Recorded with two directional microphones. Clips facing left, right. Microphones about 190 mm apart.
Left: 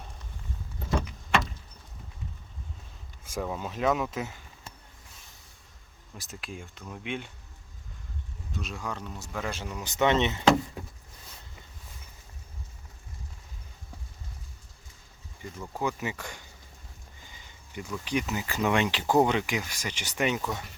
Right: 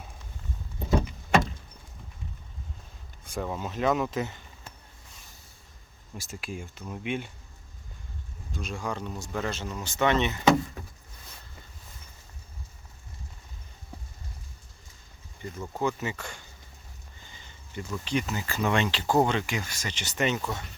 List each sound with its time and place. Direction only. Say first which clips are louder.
3.2 s speech: even; centre (ahead or behind)
6.1 s speech: right 3 dB; centre (ahead or behind)
8.5 s speech: right 3 dB; centre (ahead or behind); by 10.4 s 25° left (ahead or behind)
15.8 s speech: right 2 dB; 15° left (ahead or behind)
17.2 s a sound: right 1 dB; 10° left (ahead or behind)
18.0 s speech: even; 15° left (ahead or behind)